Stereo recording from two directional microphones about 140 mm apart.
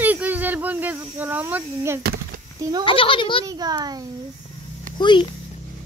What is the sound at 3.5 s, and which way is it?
Speech, 30° right (ahead or behind).